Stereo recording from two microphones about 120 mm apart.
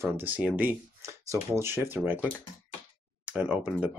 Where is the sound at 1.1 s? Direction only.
20° right (ahead or behind).